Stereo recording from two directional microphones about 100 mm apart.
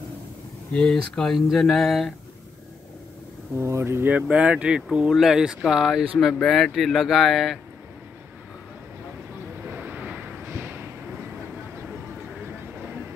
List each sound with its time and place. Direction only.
0.7 s speech: 10° left (ahead or behind)
3.5 s speech: 25° right (ahead or behind); by 7.5 s centre (ahead or behind)
9.8 s vehicle: 15° right (ahead or behind)